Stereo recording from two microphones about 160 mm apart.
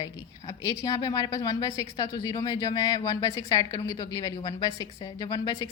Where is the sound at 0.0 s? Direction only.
25° left (ahead or behind).